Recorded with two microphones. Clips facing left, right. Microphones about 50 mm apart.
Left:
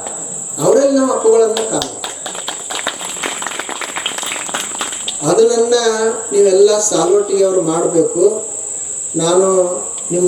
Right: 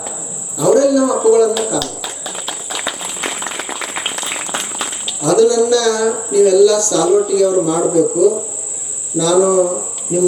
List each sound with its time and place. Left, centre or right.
0.6 s speech: centre
2.8 s a sound: centre
7.9 s speech: centre
9.1 s cricket: centre